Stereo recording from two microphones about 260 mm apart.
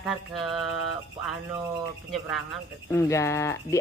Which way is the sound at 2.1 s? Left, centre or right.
Centre.